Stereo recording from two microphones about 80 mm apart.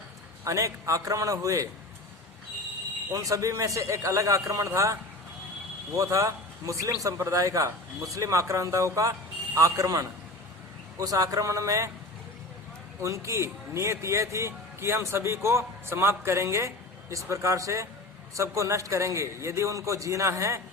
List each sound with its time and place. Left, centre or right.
0.4 s a man's voice: right
3.1 s speech: right
6.0 s a man's voice: right
13.0 s speech: right